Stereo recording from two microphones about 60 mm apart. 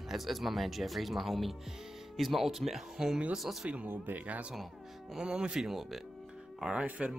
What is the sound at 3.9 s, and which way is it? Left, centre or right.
Speech, right.